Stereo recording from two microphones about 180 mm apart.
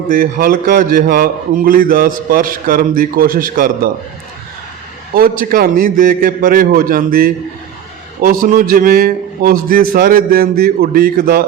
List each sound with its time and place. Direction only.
0.1 s a man's voice: 55° right (ahead or behind)
5.4 s a man's voice: 55° right (ahead or behind)